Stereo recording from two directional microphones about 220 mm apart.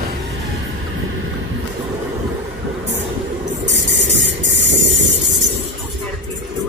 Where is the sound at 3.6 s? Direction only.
55° right (ahead or behind).